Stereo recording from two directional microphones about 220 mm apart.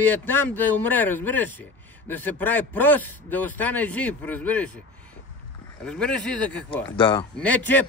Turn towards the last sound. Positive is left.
turn(degrees=10)  # may be behind; listen again after turning